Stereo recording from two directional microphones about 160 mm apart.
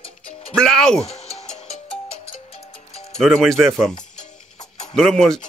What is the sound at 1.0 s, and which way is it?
Music, 40° left (ahead or behind).